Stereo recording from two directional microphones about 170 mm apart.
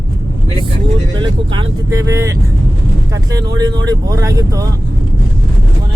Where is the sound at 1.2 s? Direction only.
30° right (ahead or behind).